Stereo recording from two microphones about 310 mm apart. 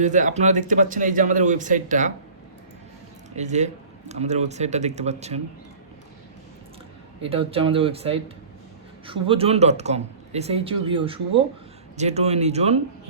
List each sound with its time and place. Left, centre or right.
0.0 s speech: right
3.3 s speech: right
7.2 s speech: centre